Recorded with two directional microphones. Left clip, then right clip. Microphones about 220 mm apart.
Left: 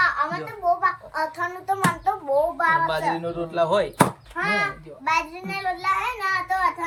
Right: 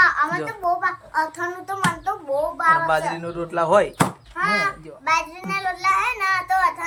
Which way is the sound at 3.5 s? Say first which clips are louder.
Right 4 dB; 15° right (ahead or behind).